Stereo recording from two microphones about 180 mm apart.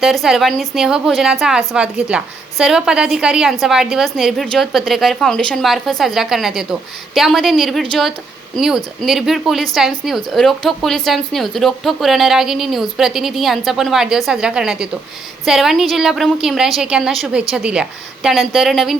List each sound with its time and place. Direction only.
0.0 s a woman's voice: centre (ahead or behind)